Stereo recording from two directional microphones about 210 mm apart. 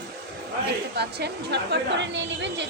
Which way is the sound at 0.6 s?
50° right (ahead or behind).